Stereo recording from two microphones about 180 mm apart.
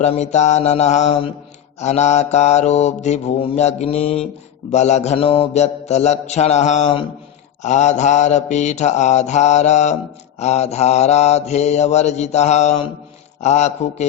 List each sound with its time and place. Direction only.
0.0 s mantra: 40° left (ahead or behind)